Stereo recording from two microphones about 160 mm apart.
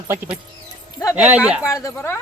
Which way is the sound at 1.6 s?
20° left (ahead or behind).